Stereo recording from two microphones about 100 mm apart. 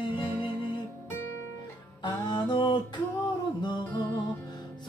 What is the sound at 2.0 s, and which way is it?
Music, 50° left (ahead or behind).